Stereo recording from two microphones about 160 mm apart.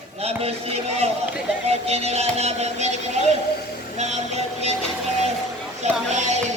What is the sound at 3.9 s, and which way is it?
Music, 45° right (ahead or behind).